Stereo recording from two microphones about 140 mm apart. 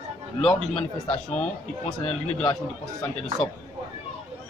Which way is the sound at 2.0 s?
55° left (ahead or behind).